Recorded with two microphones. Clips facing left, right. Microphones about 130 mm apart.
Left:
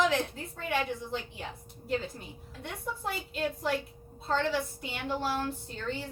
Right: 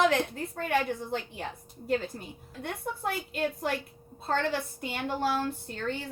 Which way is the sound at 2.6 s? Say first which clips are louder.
Right 3 dB; 55° right (ahead or behind).